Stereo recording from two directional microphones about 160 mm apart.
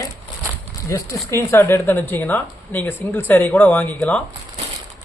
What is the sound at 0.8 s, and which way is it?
Speech, 20° left (ahead or behind).